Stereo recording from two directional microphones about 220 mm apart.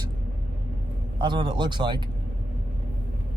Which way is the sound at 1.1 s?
20° right (ahead or behind).